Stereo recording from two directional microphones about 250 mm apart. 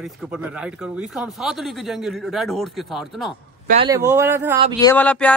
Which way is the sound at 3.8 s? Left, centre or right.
Centre.